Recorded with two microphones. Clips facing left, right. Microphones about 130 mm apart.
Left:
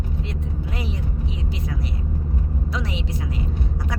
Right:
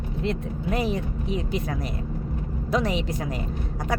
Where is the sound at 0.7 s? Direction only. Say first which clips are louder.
Right 8 dB; 50° right (ahead or behind).